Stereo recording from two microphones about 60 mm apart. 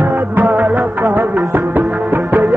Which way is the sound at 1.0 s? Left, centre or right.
Right.